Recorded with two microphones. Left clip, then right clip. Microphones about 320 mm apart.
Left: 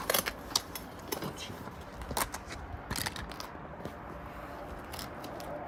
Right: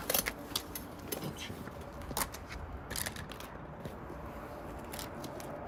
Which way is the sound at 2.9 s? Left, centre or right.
Centre.